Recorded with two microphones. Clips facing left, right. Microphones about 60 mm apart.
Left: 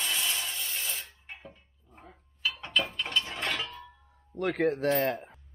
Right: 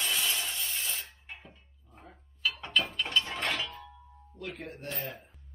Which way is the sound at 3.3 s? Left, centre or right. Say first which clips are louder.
Even; centre.